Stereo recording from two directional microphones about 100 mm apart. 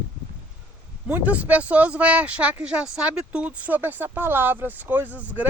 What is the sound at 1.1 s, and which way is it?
Speech, 15° right (ahead or behind).